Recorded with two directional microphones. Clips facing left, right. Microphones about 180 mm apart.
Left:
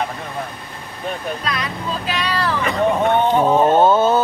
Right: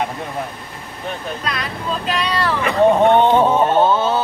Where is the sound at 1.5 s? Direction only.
Centre (ahead or behind).